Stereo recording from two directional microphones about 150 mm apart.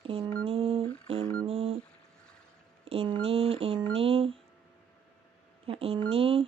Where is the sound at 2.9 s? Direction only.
35° right (ahead or behind).